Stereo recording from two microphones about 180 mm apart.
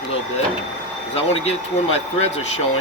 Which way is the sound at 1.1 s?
35° left (ahead or behind).